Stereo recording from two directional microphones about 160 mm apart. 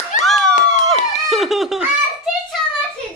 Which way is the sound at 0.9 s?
Centre (ahead or behind).